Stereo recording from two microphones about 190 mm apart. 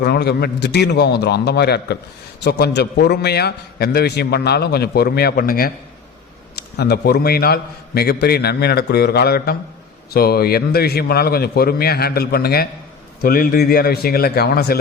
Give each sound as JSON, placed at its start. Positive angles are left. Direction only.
{"t": 0.0, "sound": "a man's voice", "side_deg": 60}